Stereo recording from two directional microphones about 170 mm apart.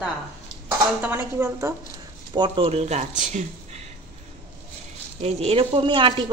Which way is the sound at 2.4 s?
35° right (ahead or behind).